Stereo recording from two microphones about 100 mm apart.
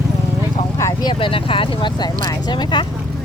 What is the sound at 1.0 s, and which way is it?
Speech, 60° left (ahead or behind).